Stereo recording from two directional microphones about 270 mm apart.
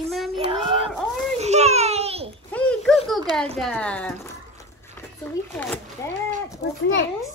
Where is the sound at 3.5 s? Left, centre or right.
Centre.